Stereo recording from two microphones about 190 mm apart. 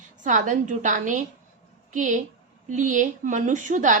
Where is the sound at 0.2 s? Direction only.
40° right (ahead or behind).